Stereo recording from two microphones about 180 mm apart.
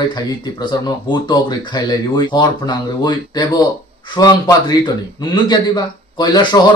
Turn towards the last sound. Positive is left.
turn(degrees=25)  # may be behind; listen again after turning